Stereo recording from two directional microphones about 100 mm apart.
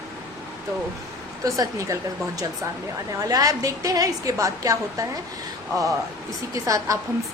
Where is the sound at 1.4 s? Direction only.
35° right (ahead or behind).